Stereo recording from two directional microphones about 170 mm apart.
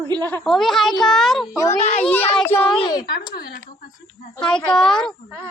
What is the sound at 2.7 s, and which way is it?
Speech, 25° left (ahead or behind).